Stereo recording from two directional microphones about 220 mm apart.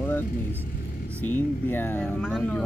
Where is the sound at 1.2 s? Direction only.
10° left (ahead or behind).